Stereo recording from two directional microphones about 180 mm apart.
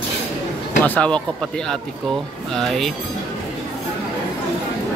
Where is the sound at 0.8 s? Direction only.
10° left (ahead or behind).